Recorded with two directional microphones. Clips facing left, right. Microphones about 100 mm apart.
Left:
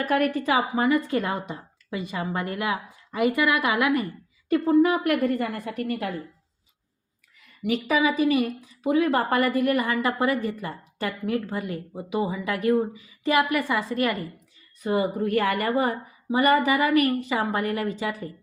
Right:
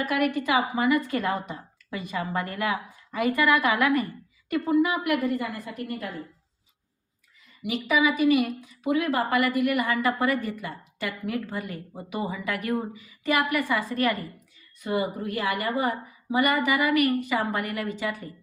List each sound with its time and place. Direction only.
0.0 s a woman's voice: 40° left (ahead or behind); by 4.0 s 20° left (ahead or behind)
4.4 s a woman's voice: 35° left (ahead or behind); by 6.1 s 65° left (ahead or behind)
7.6 s a woman's voice: 40° left (ahead or behind); by 14.4 s 20° left (ahead or behind)
14.8 s a woman's voice: 35° left (ahead or behind)